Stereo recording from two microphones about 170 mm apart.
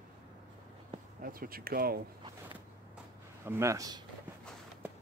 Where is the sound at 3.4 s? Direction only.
15° right (ahead or behind).